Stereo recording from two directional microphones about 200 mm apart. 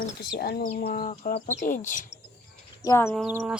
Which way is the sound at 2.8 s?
15° left (ahead or behind).